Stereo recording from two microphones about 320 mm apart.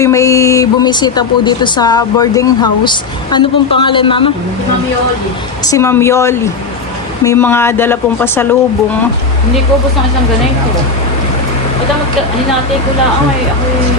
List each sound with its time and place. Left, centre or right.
0.0 s speech: centre
5.6 s speech: centre